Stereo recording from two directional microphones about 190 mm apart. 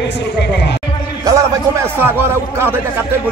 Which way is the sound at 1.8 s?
10° right (ahead or behind).